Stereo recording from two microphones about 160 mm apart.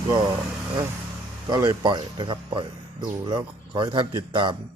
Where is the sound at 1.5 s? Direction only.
25° right (ahead or behind).